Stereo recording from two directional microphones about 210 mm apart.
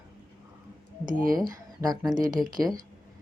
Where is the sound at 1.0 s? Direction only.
40° right (ahead or behind).